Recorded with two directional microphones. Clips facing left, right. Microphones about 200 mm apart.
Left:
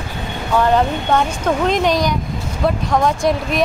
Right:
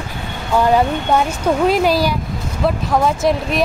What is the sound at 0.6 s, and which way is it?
Speech, 10° right (ahead or behind).